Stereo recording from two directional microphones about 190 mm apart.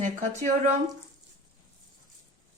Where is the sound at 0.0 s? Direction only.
40° right (ahead or behind).